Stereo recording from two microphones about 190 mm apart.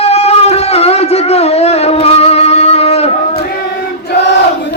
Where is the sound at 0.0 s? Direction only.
35° left (ahead or behind).